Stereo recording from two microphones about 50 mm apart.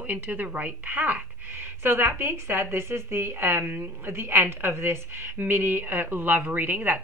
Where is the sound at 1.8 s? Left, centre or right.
Right.